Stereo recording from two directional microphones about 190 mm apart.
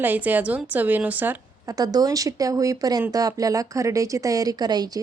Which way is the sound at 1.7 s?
20° right (ahead or behind).